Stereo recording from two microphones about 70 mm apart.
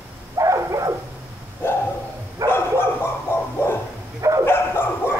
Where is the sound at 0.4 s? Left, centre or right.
Right.